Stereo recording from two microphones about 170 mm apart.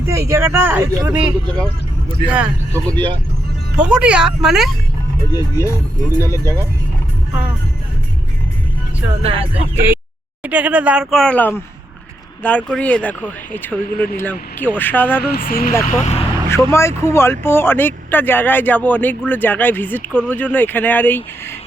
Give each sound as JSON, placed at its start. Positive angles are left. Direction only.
{"t": 0.0, "sound": "speech", "side_deg": -15}
{"t": 2.9, "sound": "speech", "side_deg": -30}
{"t": 3.8, "sound": "speech", "side_deg": -5}
{"t": 5.3, "sound": "speech", "side_deg": 20}
{"t": 9.7, "sound": "speech", "side_deg": -10}
{"t": 15.2, "sound": "speech", "side_deg": 60}
{"t": 15.9, "sound": "speech", "side_deg": 40}
{"t": 16.7, "sound": "speech", "side_deg": 15}